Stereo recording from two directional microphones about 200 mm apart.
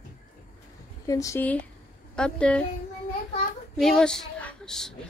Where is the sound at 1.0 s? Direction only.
15° left (ahead or behind).